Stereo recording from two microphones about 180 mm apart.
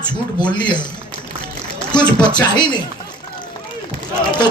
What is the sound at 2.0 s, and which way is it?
Speech, 25° left (ahead or behind).